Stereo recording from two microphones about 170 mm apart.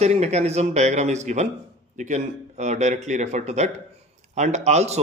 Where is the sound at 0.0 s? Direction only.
40° right (ahead or behind).